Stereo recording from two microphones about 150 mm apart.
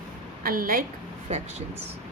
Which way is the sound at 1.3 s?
45° right (ahead or behind).